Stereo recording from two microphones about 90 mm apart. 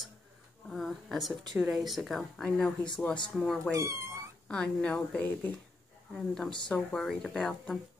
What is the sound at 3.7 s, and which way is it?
Speech, 30° right (ahead or behind).